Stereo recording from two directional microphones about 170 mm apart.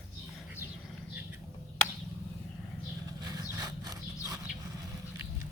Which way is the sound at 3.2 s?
25° right (ahead or behind).